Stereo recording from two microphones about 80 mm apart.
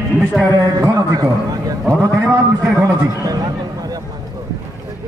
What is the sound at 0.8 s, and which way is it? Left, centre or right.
Speech, right.